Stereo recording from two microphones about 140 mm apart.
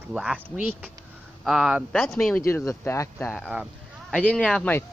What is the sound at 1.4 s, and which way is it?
Speech, centre (ahead or behind).